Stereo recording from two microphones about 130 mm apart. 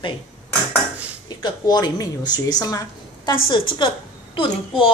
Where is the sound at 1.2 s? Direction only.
30° left (ahead or behind).